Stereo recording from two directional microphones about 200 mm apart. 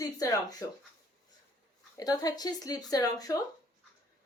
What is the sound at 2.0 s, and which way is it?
Speech, 20° left (ahead or behind).